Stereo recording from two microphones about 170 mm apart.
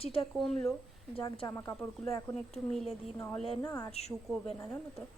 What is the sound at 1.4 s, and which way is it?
Speech, 15° left (ahead or behind).